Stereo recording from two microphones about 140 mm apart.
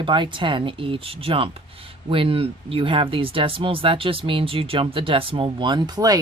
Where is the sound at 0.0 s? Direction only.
35° right (ahead or behind).